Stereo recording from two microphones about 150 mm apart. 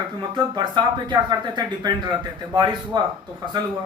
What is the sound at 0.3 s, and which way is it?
Speech, 30° right (ahead or behind).